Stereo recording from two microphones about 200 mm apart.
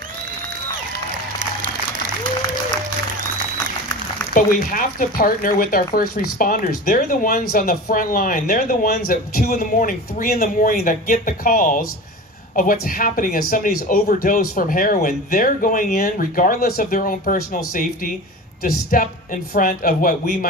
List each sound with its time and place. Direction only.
4.3 s speech: 45° left (ahead or behind)